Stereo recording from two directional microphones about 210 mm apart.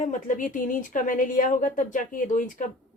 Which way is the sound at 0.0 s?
35° left (ahead or behind).